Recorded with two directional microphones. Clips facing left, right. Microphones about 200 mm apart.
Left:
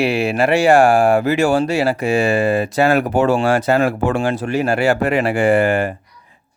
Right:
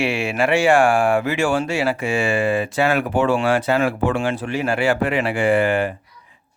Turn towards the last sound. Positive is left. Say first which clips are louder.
# left 3 dB
turn(degrees=45)  # may be behind; listen again after turning